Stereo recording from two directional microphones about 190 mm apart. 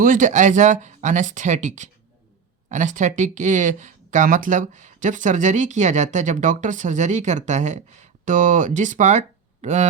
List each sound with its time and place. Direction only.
0.0 s speech: 45° right (ahead or behind)